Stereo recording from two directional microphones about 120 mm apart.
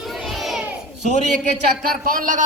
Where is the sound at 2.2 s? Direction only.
90° right.